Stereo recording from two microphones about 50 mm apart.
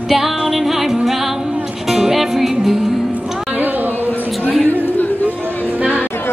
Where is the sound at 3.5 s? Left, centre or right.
Right.